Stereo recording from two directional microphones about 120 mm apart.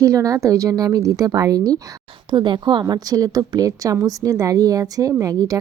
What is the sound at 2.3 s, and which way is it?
Speech, 40° right (ahead or behind).